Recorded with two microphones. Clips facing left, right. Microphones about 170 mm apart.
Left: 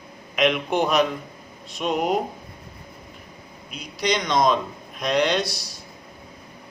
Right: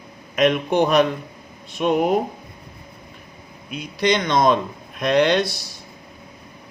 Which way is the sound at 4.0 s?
55° right (ahead or behind).